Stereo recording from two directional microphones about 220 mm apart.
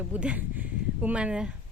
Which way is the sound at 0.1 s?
5° right (ahead or behind).